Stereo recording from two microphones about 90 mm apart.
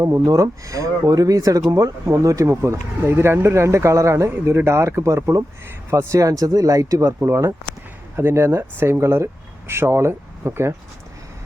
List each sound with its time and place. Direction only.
0.0 s speech: 35° right (ahead or behind)